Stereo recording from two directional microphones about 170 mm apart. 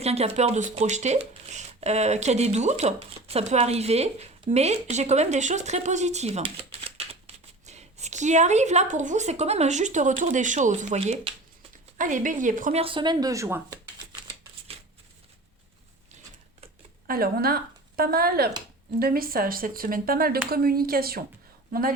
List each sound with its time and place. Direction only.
0.0 s speech: 35° right (ahead or behind)
11.9 s speech: 50° right (ahead or behind)
12.8 s speech: 30° right (ahead or behind)
17.1 s speech: 60° right (ahead or behind)